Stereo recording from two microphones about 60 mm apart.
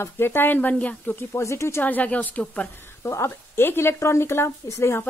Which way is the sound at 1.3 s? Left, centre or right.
Left.